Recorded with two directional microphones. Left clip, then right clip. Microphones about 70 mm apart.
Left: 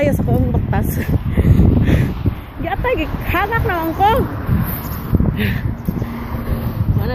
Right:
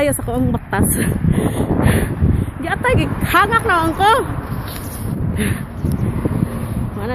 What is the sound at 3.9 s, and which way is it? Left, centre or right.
Speech, right.